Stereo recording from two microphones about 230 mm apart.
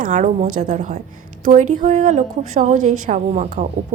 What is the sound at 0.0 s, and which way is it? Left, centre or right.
A woman's voice, right.